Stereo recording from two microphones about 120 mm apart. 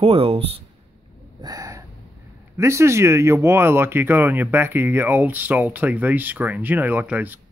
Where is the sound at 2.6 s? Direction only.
25° right (ahead or behind).